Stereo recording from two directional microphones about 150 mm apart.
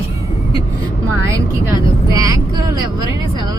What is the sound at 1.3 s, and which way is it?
Speech, 20° right (ahead or behind).